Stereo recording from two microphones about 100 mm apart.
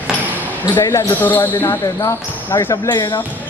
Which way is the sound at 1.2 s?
20° left (ahead or behind).